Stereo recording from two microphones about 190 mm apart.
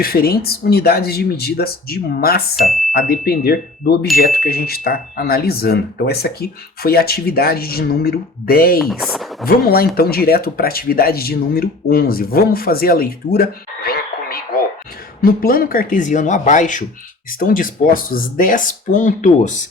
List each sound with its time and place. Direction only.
0.0 s speech: 50° left (ahead or behind)
2.6 s speech: centre (ahead or behind)
2.9 s speech: 55° left (ahead or behind)
8.8 s speech: centre (ahead or behind)
9.5 s speech: 55° left (ahead or behind)